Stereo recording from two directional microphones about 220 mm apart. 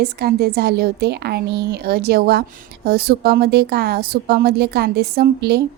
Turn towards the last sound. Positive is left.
turn(degrees=-45)  # may be behind; listen again after turning